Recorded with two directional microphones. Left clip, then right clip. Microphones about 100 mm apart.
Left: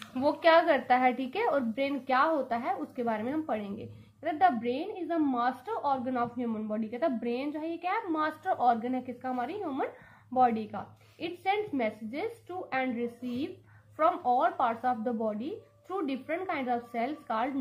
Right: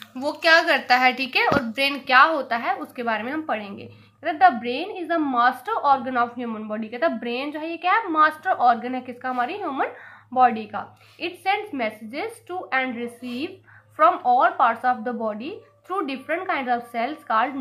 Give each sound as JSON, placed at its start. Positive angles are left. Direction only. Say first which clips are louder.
{"t": 0.1, "sound": "a woman's voice", "louder": "right 5 dB", "side_deg": 5}
{"t": 1.8, "sound": "a woman's voice", "louder": "right 14 dB", "side_deg": 10}